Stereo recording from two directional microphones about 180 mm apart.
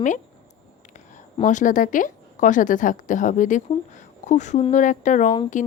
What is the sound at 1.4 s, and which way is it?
Speech, 45° left (ahead or behind).